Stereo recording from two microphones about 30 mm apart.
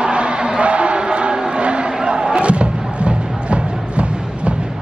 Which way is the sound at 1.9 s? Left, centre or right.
Right.